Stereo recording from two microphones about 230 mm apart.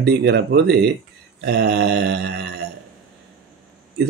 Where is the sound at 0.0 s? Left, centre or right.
Right.